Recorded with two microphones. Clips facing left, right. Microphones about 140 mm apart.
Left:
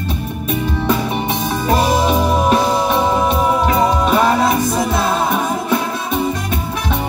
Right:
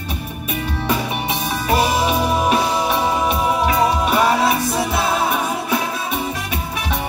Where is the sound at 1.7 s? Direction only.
40° left (ahead or behind).